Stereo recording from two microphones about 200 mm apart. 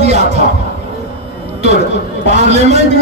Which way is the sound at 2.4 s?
35° right (ahead or behind).